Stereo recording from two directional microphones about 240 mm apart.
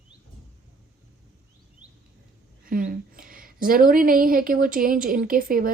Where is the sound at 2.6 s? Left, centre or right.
Right.